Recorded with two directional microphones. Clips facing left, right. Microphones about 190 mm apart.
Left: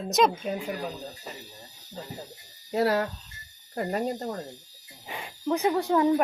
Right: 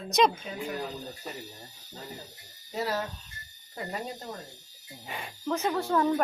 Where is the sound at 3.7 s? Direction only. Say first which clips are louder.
Left 8 dB; 55° left (ahead or behind).